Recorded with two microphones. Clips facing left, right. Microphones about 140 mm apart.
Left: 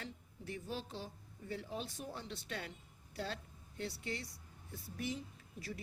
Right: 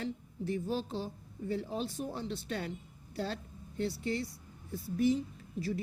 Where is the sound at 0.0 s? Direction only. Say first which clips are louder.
Right 11 dB; 30° right (ahead or behind).